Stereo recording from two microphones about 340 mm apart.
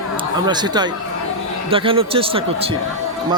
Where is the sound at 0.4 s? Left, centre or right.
Centre.